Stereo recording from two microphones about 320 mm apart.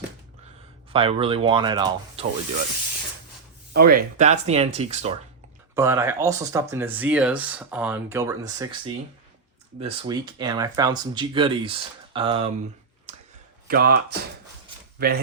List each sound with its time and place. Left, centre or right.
0.9 s speech: centre
3.7 s speech: right
5.7 s speech: centre
13.7 s speech: right